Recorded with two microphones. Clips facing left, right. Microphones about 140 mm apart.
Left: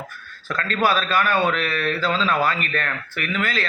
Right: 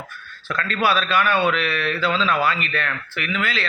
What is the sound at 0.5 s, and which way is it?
A man's voice, 40° left (ahead or behind).